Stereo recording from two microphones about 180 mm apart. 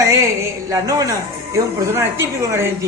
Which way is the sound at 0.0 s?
15° right (ahead or behind).